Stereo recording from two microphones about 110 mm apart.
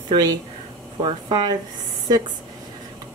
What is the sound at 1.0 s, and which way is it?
Speech, 50° right (ahead or behind).